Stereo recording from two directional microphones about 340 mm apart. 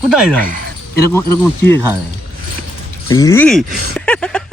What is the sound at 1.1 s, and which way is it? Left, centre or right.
Speech, centre.